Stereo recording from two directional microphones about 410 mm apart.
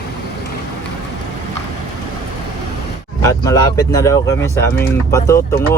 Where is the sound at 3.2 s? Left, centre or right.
Centre.